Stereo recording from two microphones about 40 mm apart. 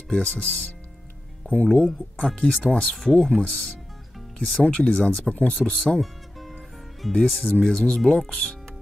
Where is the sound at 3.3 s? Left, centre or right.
Left.